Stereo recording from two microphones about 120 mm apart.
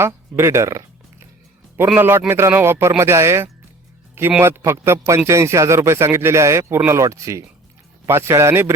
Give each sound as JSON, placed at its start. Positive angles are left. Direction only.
{"t": 0.0, "sound": "speech", "side_deg": -25}
{"t": 2.0, "sound": "speech", "side_deg": -20}